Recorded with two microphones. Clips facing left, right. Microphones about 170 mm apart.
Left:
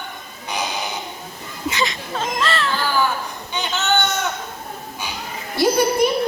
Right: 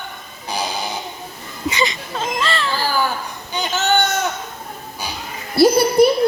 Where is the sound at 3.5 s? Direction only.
35° right (ahead or behind).